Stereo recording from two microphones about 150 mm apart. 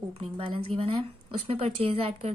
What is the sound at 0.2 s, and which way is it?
A woman's voice, 35° right (ahead or behind).